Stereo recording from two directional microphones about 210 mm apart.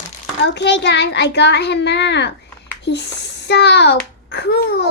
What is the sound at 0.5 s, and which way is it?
A child's voice, 55° left (ahead or behind).